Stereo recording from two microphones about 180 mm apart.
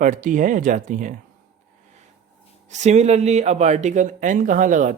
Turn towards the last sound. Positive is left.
turn(degrees=-45)  # may be behind; listen again after turning